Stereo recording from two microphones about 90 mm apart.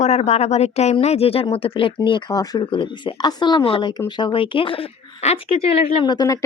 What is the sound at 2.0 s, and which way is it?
Speech, 60° left (ahead or behind).